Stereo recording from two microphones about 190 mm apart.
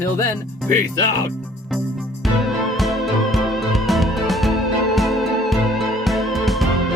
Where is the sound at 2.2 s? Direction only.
Centre (ahead or behind).